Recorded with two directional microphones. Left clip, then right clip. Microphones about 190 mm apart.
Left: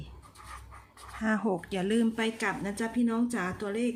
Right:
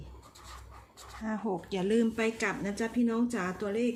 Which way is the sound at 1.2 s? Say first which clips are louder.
Left 5 dB; 35° left (ahead or behind).